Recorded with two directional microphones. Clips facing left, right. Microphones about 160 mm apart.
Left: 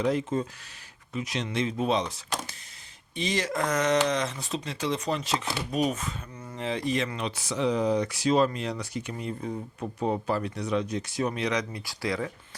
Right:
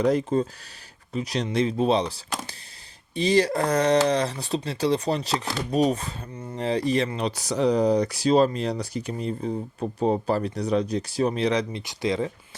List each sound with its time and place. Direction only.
0.0 s speech: 40° right (ahead or behind); by 12.3 s 20° right (ahead or behind)